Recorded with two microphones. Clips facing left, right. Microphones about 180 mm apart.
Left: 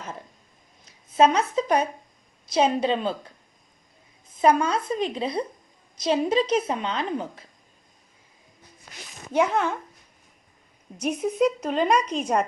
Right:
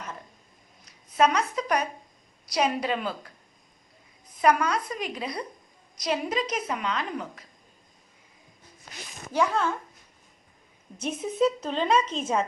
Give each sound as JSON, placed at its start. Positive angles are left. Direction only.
{"t": 1.1, "sound": "a woman's voice", "side_deg": 30}
{"t": 4.4, "sound": "a woman's voice", "side_deg": 25}
{"t": 9.3, "sound": "a woman's voice", "side_deg": 20}
{"t": 10.9, "sound": "a woman's voice", "side_deg": 10}